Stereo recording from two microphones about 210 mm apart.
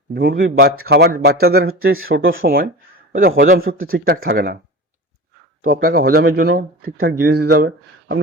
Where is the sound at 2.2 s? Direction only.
70° right (ahead or behind).